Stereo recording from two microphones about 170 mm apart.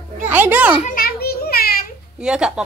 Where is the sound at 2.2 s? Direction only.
5° right (ahead or behind).